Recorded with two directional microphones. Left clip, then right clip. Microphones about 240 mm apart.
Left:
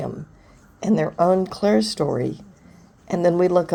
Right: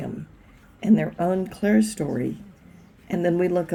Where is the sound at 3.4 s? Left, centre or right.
Left.